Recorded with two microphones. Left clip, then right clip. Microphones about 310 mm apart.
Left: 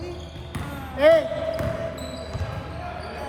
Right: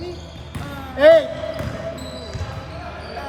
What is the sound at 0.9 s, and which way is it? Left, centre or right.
Basketball bounce, right.